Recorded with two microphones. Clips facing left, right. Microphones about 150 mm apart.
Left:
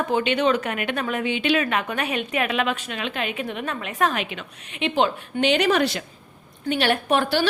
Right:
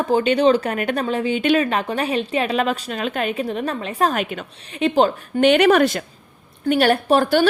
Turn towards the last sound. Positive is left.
turn(degrees=-45)  # may be behind; listen again after turning